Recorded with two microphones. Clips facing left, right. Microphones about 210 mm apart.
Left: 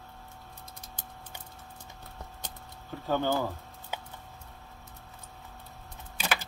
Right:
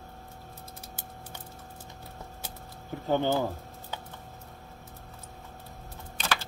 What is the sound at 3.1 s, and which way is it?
Speech, 20° right (ahead or behind).